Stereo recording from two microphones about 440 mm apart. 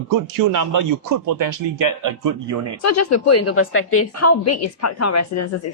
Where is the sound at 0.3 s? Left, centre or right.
Right.